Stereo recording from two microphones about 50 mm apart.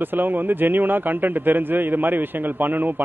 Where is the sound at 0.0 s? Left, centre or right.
Right.